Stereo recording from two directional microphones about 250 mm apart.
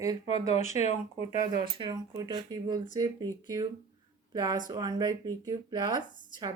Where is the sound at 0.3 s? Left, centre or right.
Left.